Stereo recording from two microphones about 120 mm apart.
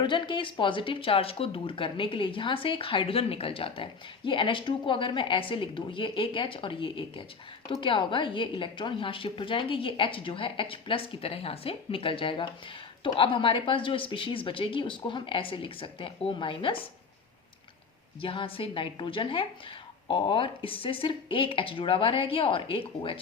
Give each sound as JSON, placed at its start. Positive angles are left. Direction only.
{"t": 0.0, "sound": "speech", "side_deg": 40}
{"t": 18.2, "sound": "speech", "side_deg": 50}